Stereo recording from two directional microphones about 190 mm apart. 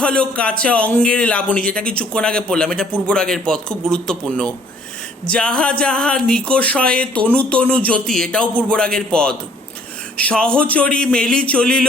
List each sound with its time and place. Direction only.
0.0 s speech: 5° left (ahead or behind)